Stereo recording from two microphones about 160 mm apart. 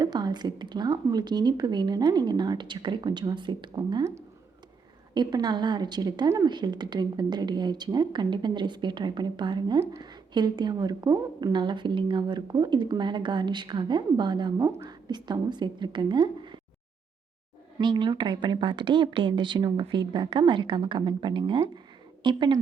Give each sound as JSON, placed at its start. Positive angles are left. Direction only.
{"t": 0.0, "sound": "speech", "side_deg": -25}
{"t": 17.7, "sound": "speech", "side_deg": -30}